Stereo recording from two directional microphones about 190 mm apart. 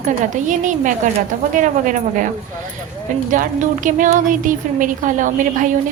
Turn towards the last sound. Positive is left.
turn(degrees=-45)  # may be behind; listen again after turning